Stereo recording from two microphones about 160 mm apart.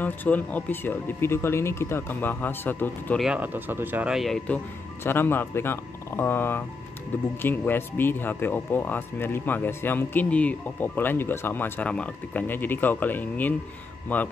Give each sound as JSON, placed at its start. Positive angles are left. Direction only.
{"t": 0.0, "sound": "speech", "side_deg": 10}
{"t": 3.2, "sound": "speech", "side_deg": -5}
{"t": 5.0, "sound": "speech", "side_deg": 15}